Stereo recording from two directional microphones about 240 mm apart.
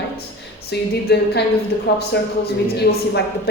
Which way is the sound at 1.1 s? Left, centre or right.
Left.